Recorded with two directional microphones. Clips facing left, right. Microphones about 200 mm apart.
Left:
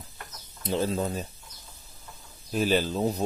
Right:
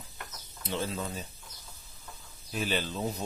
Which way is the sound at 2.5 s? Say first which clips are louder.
Left 7 dB; 40° left (ahead or behind).